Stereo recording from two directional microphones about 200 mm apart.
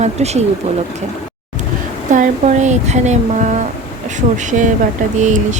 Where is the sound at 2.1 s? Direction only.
40° right (ahead or behind).